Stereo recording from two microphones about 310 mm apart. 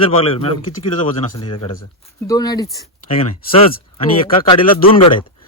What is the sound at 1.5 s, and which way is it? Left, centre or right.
Speech, left.